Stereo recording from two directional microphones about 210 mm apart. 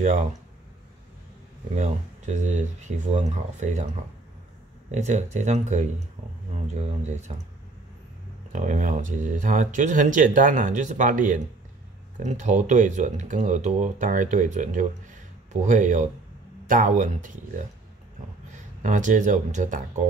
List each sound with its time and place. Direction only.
0.0 s speech: 35° right (ahead or behind)
1.8 s speech: 35° right (ahead or behind)
4.9 s speech: 35° right (ahead or behind)
8.5 s speech: 35° right (ahead or behind)
18.8 s speech: 35° right (ahead or behind)